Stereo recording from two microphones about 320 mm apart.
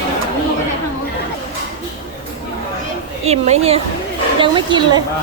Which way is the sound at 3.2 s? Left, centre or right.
Centre.